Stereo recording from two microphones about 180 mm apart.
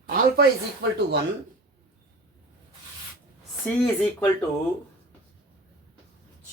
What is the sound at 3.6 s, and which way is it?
Speech, 5° left (ahead or behind).